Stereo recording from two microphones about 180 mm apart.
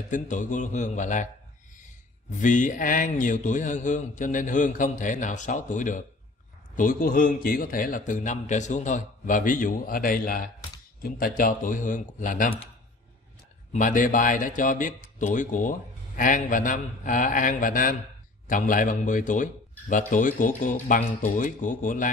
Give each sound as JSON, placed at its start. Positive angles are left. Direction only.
{"t": 0.1, "sound": "a man's voice", "side_deg": 45}
{"t": 2.3, "sound": "a man's voice", "side_deg": 45}
{"t": 13.7, "sound": "a man's voice", "side_deg": 45}